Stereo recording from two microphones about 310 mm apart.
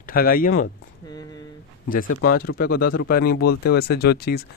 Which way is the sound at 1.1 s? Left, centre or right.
Centre.